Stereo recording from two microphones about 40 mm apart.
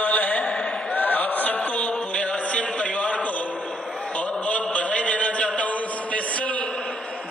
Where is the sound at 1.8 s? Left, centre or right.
Left.